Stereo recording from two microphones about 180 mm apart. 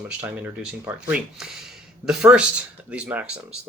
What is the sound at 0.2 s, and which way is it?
Speech, 10° right (ahead or behind).